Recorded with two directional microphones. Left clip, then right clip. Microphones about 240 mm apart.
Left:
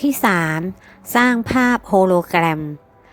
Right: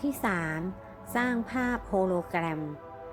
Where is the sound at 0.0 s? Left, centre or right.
Left.